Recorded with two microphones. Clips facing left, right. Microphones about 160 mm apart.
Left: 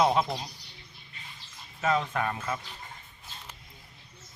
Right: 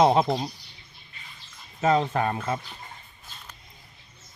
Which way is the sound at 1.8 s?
30° right (ahead or behind).